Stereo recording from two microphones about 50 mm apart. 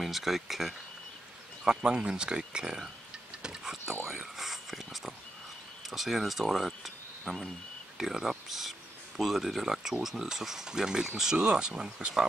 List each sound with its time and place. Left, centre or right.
0.0 s speech: centre
1.6 s speech: centre
3.4 s whispering: centre
3.8 s whispering: right
4.1 s a sound: centre
5.9 s speech: centre